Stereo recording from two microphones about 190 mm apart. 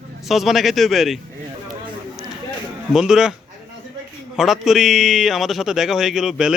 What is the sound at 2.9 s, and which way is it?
Speech, 5° right (ahead or behind).